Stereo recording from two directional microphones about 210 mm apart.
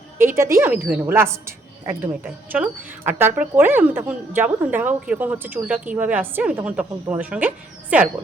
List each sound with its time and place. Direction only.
0.2 s a woman's voice: 10° right (ahead or behind)